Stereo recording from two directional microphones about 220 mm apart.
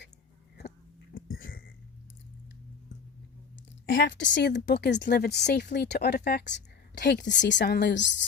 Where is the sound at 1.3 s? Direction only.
40° left (ahead or behind).